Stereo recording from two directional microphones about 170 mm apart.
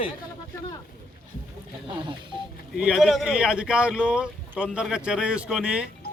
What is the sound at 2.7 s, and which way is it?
Speech, 5° right (ahead or behind).